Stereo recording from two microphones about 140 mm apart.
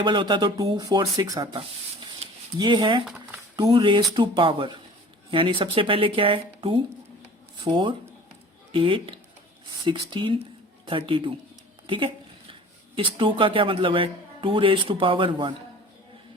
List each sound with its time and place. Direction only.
0.0 s speech: 35° right (ahead or behind)
11.9 s a sound: 40° right (ahead or behind)
13.0 s speech: 40° right (ahead or behind)